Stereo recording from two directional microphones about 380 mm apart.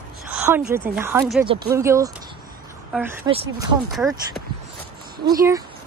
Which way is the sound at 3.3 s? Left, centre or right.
Centre.